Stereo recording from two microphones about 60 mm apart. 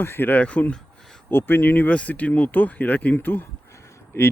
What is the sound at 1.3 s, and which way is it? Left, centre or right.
Speech, left.